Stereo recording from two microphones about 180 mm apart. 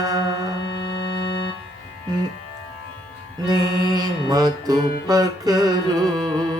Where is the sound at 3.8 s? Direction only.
20° right (ahead or behind).